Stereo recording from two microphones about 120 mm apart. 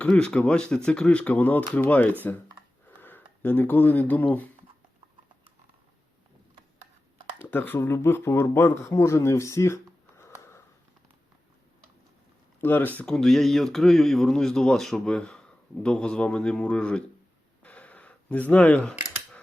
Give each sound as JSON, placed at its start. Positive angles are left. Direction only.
{"t": 0.0, "sound": "speech", "side_deg": 10}
{"t": 7.3, "sound": "speech", "side_deg": 15}
{"t": 12.5, "sound": "speech", "side_deg": 15}
{"t": 13.0, "sound": "speech", "side_deg": 5}
{"t": 17.6, "sound": "camera", "side_deg": 10}